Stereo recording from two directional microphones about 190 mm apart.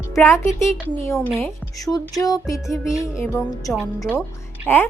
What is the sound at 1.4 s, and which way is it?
A woman's voice, 15° left (ahead or behind).